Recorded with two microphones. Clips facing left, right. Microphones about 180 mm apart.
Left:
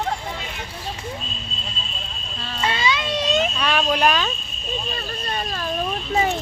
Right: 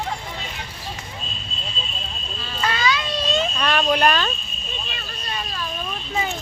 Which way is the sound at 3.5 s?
5° left (ahead or behind).